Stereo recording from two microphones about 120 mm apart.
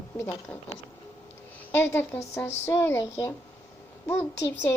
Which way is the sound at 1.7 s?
15° left (ahead or behind).